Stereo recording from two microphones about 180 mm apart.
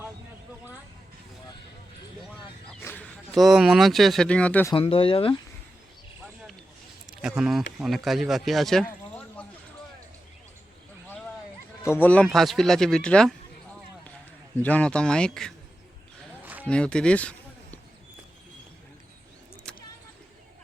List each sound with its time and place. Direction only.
2.8 s speech: 10° left (ahead or behind)
4.7 s speech: 30° left (ahead or behind)
7.1 s speech: 5° right (ahead or behind)
11.8 s speech: 10° left (ahead or behind)
14.6 s speech: 5° left (ahead or behind)
16.6 s speech: 5° left (ahead or behind)
19.7 s vehicle: 5° left (ahead or behind)